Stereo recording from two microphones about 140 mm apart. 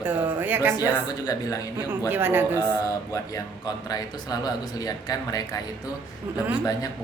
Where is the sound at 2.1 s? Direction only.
15° right (ahead or behind).